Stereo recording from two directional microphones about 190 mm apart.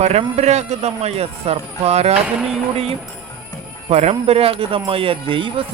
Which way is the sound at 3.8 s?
35° right (ahead or behind).